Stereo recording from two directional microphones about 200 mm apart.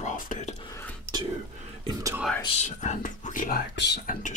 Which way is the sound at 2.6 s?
35° left (ahead or behind).